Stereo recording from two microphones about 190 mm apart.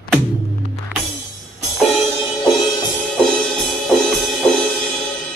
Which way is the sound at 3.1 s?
5° left (ahead or behind).